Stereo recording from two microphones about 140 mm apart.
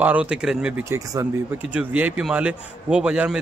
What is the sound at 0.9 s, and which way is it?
A man's voice, 20° right (ahead or behind).